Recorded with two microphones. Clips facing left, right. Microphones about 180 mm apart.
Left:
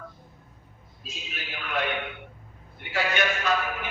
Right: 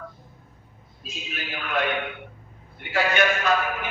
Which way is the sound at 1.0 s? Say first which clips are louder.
Right 5 dB; 50° right (ahead or behind).